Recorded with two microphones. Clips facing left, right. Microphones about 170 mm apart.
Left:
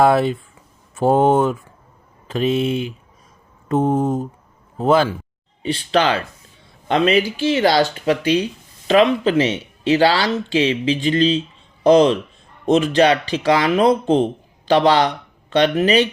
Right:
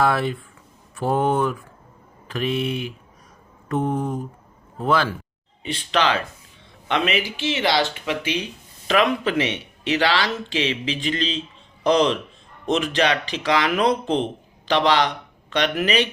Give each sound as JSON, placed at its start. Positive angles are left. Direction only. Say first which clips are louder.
{"t": 0.0, "sound": "speech", "louder": "left 6 dB", "side_deg": 25}
{"t": 3.8, "sound": "mantra", "louder": "left 6 dB", "side_deg": 45}
{"t": 4.0, "sound": "speech", "louder": "left 6 dB", "side_deg": 25}
{"t": 5.6, "sound": "a man's voice", "louder": "left 4 dB", "side_deg": 35}